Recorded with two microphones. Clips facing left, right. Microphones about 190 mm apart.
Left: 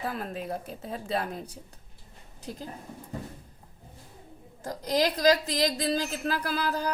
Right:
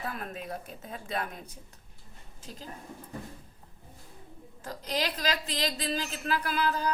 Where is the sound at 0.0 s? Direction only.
35° left (ahead or behind).